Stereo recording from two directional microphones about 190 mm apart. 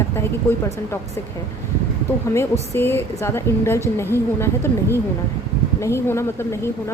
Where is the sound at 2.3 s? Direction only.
10° left (ahead or behind).